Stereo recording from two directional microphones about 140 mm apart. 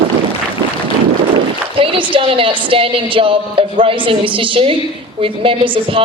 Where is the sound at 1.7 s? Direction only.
40° right (ahead or behind).